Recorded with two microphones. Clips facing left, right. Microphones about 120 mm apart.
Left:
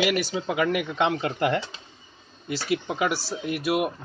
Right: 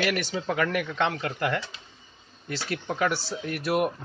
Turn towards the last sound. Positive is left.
turn(degrees=10)  # may be behind; listen again after turning